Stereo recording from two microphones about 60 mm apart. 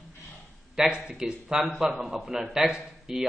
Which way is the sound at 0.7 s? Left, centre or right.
Centre.